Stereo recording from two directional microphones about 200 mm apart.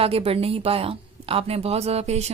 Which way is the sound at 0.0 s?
30° right (ahead or behind).